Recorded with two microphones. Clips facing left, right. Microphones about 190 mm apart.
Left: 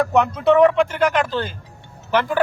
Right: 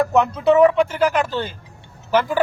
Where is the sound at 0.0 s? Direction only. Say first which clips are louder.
Even; centre (ahead or behind).